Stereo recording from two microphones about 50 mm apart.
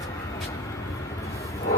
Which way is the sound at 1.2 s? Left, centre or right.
Left.